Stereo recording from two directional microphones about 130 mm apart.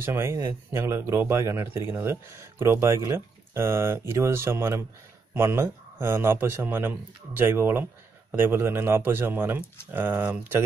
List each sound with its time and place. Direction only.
0.0 s speech: 20° right (ahead or behind)